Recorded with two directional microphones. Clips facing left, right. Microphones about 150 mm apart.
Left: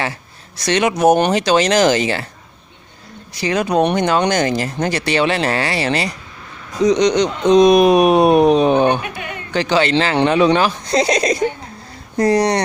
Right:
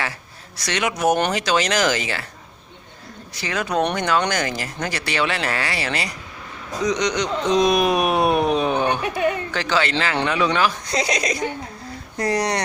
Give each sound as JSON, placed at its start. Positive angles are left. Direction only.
{"t": 0.6, "sound": "speech", "side_deg": 25}
{"t": 3.4, "sound": "speech", "side_deg": 20}